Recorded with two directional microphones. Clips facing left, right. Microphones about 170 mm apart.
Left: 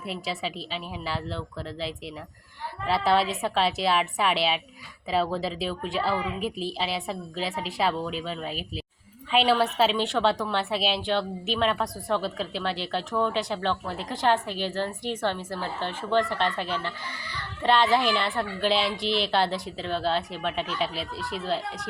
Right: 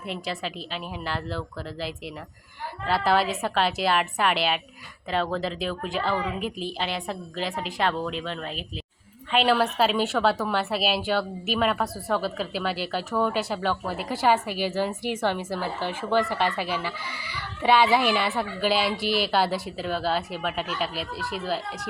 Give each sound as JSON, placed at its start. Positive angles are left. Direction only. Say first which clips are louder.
{"t": 0.0, "sound": "a woman's voice", "louder": "even", "side_deg": 0}